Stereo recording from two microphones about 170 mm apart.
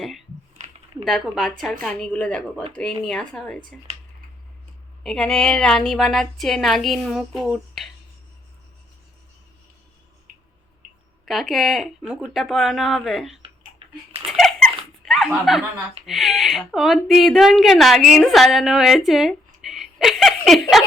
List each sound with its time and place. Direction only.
0.6 s a sound: 45° right (ahead or behind)
1.0 s speech: centre (ahead or behind)
5.0 s speech: 5° left (ahead or behind)
11.3 s speech: centre (ahead or behind)
13.4 s a sound: 30° right (ahead or behind)
14.3 s squeak: centre (ahead or behind)
15.0 s snicker: centre (ahead or behind)
16.0 s speech: centre (ahead or behind)
19.6 s a sound: centre (ahead or behind)